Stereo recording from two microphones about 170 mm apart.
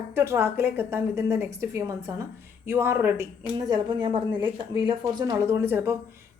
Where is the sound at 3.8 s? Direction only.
25° right (ahead or behind).